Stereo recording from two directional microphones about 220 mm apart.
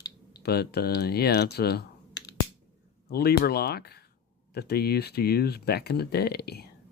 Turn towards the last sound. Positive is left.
turn(degrees=45)  # may be behind; listen again after turning